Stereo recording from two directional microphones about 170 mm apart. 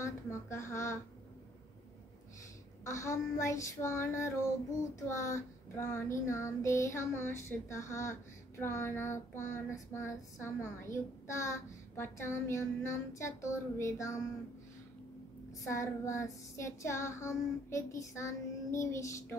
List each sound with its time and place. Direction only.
0.0 s child singing: 15° left (ahead or behind)
2.8 s child singing: 15° left (ahead or behind)
15.7 s child singing: 15° left (ahead or behind)